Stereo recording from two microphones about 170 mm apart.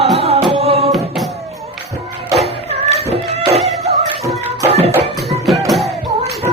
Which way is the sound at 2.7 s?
35° right (ahead or behind).